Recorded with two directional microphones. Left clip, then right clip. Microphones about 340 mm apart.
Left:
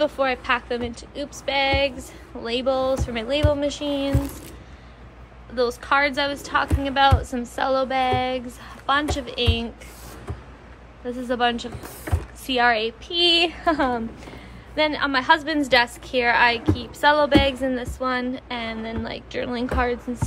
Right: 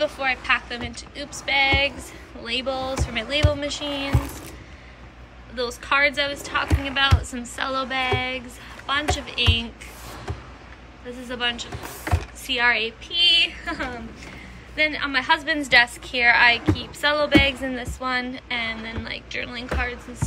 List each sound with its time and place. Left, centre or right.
0.0 s a woman's voice: centre
5.6 s a woman's voice: centre
11.2 s a woman's voice: centre